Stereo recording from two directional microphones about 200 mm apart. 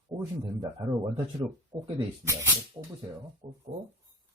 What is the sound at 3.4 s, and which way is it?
Speech, 25° right (ahead or behind).